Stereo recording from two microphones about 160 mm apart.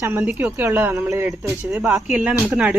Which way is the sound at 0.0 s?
10° right (ahead or behind).